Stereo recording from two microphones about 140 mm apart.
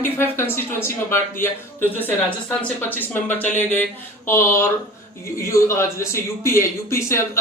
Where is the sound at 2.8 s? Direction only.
15° left (ahead or behind).